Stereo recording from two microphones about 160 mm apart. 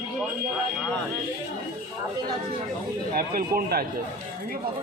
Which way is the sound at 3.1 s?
70° right (ahead or behind).